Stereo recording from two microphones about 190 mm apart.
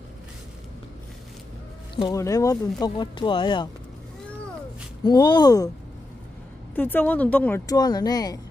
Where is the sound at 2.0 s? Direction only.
20° left (ahead or behind).